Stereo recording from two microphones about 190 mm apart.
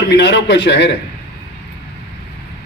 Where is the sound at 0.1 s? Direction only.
65° left (ahead or behind).